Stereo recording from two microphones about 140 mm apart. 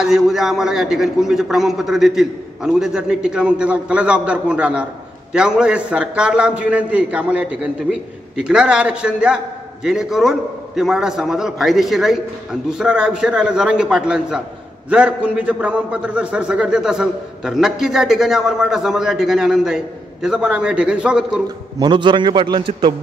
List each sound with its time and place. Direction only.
0.0 s a man's voice: 5° right (ahead or behind)
21.7 s a man's voice: 35° right (ahead or behind)